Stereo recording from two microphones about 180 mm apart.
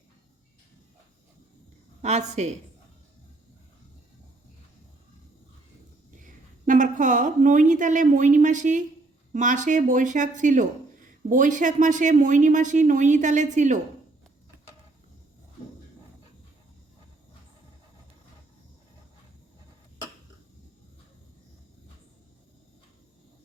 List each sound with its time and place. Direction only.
2.0 s a woman's voice: 40° right (ahead or behind)
6.1 s a woman's voice: 45° right (ahead or behind)